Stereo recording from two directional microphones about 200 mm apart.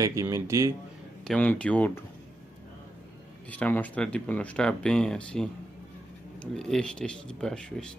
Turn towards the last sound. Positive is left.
turn(degrees=5)  # may be behind; listen again after turning